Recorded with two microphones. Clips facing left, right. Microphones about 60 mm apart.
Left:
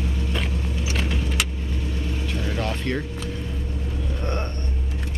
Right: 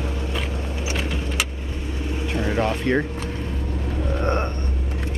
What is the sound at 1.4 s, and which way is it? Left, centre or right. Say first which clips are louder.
Vehicle: even; right.